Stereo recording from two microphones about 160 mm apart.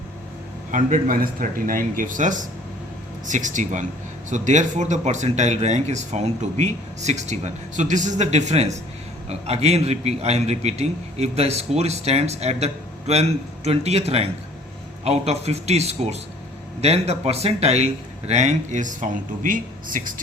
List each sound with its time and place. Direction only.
0.7 s a man's voice: 55° right (ahead or behind)